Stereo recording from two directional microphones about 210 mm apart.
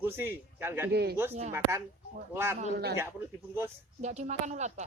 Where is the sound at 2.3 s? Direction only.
10° right (ahead or behind).